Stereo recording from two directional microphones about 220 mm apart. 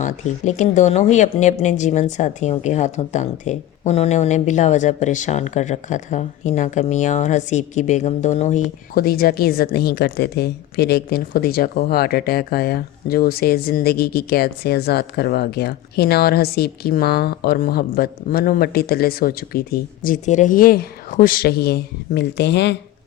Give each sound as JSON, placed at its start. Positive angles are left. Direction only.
{"t": 0.0, "sound": "speech", "side_deg": 35}
{"t": 9.0, "sound": "a woman's voice", "side_deg": 45}